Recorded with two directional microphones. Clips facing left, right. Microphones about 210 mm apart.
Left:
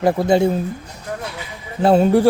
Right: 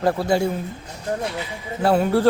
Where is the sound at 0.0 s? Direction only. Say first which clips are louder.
Left 4 dB; 15° left (ahead or behind).